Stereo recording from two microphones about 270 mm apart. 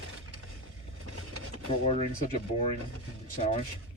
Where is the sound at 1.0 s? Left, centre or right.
Right.